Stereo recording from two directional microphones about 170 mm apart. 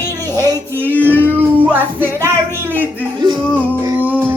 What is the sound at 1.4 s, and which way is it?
Music, 10° right (ahead or behind).